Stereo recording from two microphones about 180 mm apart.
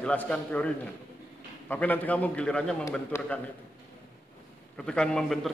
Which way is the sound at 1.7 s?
10° left (ahead or behind).